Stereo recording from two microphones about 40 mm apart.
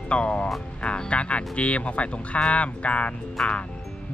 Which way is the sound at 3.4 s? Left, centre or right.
Centre.